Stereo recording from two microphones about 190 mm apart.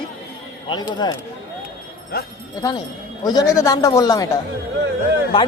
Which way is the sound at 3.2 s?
20° left (ahead or behind).